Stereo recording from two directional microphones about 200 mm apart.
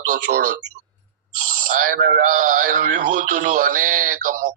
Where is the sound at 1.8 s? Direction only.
45° right (ahead or behind).